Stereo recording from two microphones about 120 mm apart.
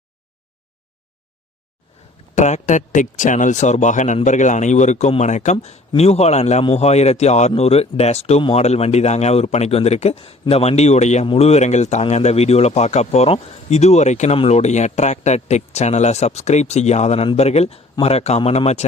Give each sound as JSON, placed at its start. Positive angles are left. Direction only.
{"t": 2.3, "sound": "speech", "side_deg": 75}
{"t": 11.3, "sound": "speech", "side_deg": 60}
{"t": 14.3, "sound": "speech", "side_deg": 65}